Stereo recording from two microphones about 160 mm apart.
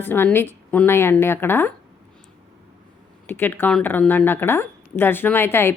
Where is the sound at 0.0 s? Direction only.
10° left (ahead or behind).